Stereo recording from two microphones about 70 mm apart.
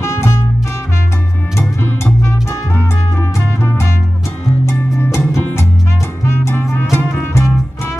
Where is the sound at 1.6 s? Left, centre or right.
Left.